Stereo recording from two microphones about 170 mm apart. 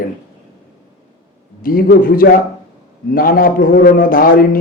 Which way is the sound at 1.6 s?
55° left (ahead or behind).